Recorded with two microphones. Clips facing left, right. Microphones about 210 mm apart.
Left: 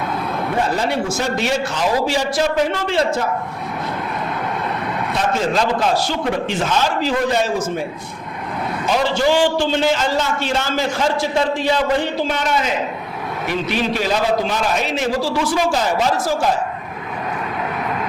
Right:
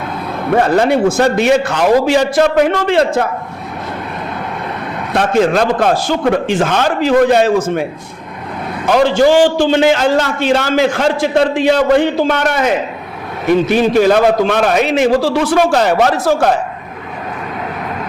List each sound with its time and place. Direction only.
0.5 s a man's voice: 60° right (ahead or behind)
5.1 s a man's voice: 65° right (ahead or behind)
8.9 s a man's voice: 55° right (ahead or behind)
9.9 s a man's voice: 65° right (ahead or behind)
13.5 s a man's voice: 50° right (ahead or behind); by 16.6 s 65° right (ahead or behind)